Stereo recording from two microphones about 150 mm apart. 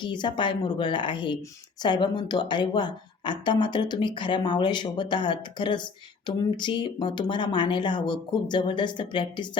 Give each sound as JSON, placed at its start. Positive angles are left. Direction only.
{"t": 0.0, "sound": "speech", "side_deg": 30}